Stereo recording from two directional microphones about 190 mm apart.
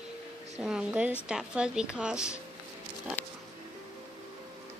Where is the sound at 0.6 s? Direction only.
5° right (ahead or behind).